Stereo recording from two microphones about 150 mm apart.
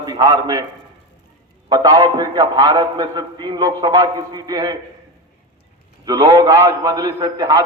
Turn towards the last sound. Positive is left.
turn(degrees=-25)  # may be behind; listen again after turning